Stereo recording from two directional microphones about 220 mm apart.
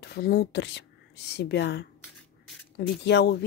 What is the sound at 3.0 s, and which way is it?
Speech, 50° left (ahead or behind).